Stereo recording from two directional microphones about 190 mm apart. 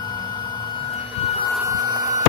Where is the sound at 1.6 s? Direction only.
20° right (ahead or behind).